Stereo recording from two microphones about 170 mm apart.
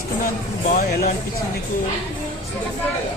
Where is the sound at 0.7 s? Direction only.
65° left (ahead or behind).